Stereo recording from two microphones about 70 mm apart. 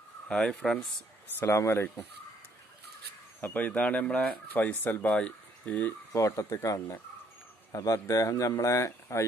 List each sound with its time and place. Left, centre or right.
0.3 s speech: centre
1.4 s speech: left
3.3 s speech: left
5.0 s speech: centre
6.1 s speech: left